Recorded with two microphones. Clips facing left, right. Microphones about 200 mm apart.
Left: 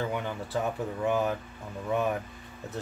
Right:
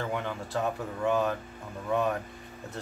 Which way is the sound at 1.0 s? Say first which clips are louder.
Right 1 dB; 15° left (ahead or behind).